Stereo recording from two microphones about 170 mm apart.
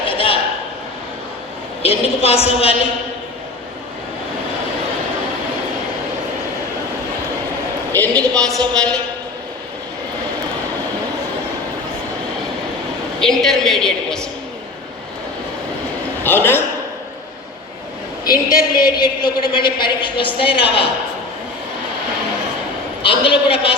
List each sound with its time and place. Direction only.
0.0 s a sound: 30° left (ahead or behind)
1.8 s a woman's voice: 35° left (ahead or behind)
7.9 s a woman's voice: 10° left (ahead or behind)
13.1 s a woman's voice: centre (ahead or behind)
16.2 s a sound: 15° left (ahead or behind)
18.3 s a woman's voice: 20° left (ahead or behind)
23.0 s a woman's voice: 30° left (ahead or behind)